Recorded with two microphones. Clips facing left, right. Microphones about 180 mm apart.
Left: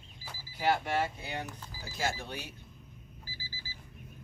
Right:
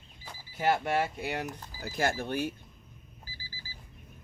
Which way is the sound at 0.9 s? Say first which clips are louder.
Right 3 dB; 65° right (ahead or behind).